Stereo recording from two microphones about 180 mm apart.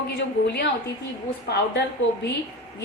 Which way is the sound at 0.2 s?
75° left (ahead or behind).